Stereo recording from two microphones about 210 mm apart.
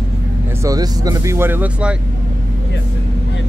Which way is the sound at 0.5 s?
15° right (ahead or behind).